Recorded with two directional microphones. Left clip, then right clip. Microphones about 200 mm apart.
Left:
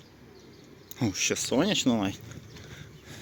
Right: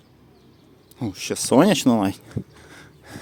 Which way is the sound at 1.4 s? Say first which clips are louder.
Right 13 dB; 45° right (ahead or behind).